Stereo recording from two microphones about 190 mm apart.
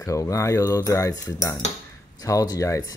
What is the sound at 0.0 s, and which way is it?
Speech, 15° left (ahead or behind).